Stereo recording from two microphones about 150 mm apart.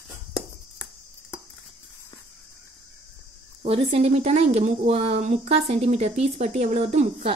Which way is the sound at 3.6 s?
45° right (ahead or behind).